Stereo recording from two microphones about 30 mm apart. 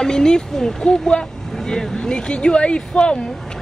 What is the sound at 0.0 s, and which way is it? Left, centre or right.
Speech, left.